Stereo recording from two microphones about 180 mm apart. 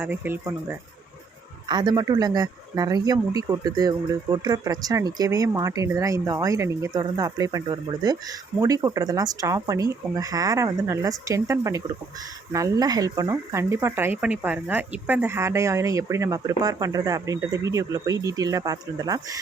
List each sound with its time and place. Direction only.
0.0 s speech: 10° right (ahead or behind)
1.6 s speech: 25° right (ahead or behind)